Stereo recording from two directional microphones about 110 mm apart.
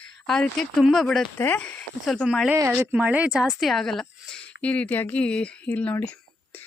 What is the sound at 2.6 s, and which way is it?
Speech, 15° right (ahead or behind).